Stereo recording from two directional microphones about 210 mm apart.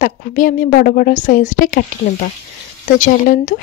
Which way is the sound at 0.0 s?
40° left (ahead or behind).